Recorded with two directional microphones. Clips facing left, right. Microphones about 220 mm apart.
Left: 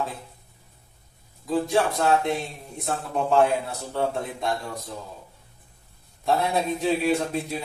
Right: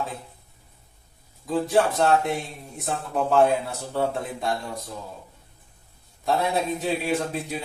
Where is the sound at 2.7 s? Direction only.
5° right (ahead or behind).